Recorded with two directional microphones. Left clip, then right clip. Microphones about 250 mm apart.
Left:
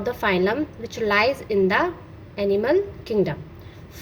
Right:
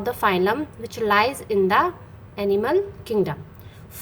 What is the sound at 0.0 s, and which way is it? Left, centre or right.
A woman's voice, centre.